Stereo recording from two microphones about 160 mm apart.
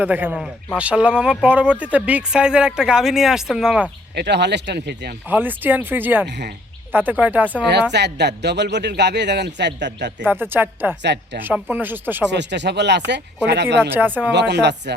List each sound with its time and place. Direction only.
0.0 s a man's voice: 10° right (ahead or behind)
4.1 s a man's voice: 90° right
5.3 s speech: 10° right (ahead or behind)
7.7 s a man's voice: 90° right
10.2 s speech: 15° right (ahead or behind)
12.3 s a man's voice: 90° right
13.9 s speech: 10° right (ahead or behind)
14.3 s a man's voice: 90° right